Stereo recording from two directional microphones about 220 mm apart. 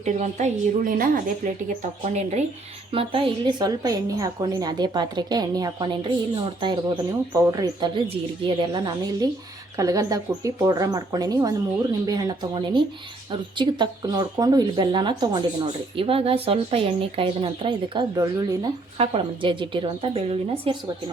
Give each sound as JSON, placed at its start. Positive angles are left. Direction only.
{"t": 0.0, "sound": "a woman's voice", "side_deg": -30}